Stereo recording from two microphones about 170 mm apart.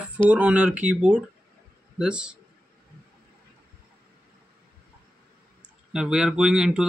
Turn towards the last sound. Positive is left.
turn(degrees=-5)  # may be behind; listen again after turning